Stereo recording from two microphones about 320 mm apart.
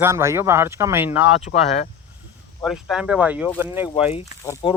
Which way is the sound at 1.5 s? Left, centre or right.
Left.